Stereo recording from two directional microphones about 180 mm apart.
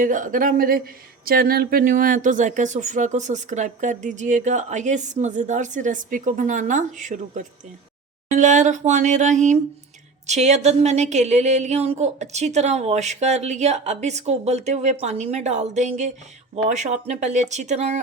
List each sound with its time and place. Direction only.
0.0 s speech: 45° right (ahead or behind)